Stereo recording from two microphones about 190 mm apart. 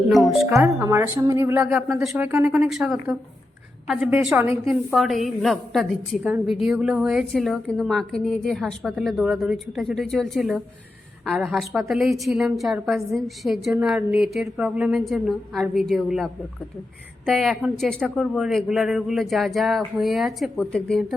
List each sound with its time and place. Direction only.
0.4 s a woman's voice: 10° right (ahead or behind); by 21.2 s 5° left (ahead or behind)